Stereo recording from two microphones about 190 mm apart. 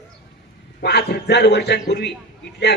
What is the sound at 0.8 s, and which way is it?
A man's voice, 60° left (ahead or behind).